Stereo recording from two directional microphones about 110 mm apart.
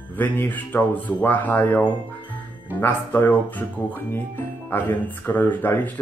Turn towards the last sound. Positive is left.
turn(degrees=20)  # may be behind; listen again after turning